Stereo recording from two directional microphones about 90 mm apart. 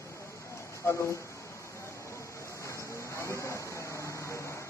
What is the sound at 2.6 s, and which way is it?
Vehicle, 35° left (ahead or behind).